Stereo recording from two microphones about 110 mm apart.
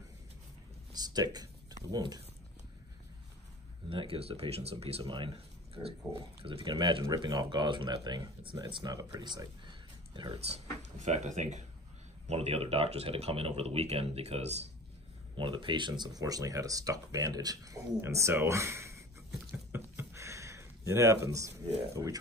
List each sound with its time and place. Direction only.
0.9 s speech: 35° right (ahead or behind)
3.9 s speech: 55° right (ahead or behind)
5.1 s speech: 55° right (ahead or behind)
10.4 s speech: 80° right
12.3 s speech: 70° right (ahead or behind)
15.3 s speech: 50° right (ahead or behind); by 19.0 s 25° right (ahead or behind)
20.0 s a sound: 25° right (ahead or behind)